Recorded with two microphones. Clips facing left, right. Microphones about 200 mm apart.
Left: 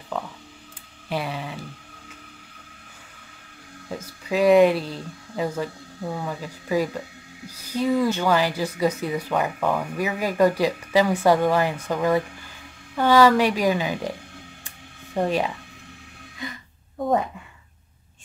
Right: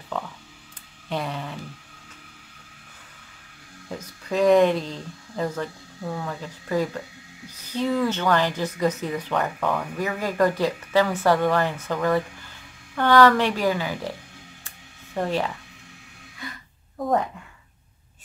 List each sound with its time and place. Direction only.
0.1 s speech: centre (ahead or behind)
4.0 s speech: 5° left (ahead or behind)
15.1 s speech: 15° left (ahead or behind)